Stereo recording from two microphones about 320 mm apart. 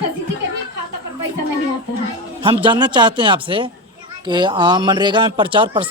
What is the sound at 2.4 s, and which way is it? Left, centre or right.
Speech, centre.